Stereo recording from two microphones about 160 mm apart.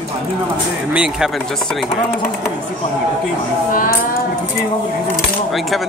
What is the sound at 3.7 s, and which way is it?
Speech, 60° left (ahead or behind).